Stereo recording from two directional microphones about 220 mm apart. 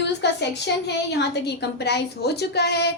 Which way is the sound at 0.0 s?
50° left (ahead or behind).